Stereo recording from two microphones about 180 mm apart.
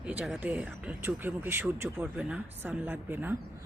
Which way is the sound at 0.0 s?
5° right (ahead or behind).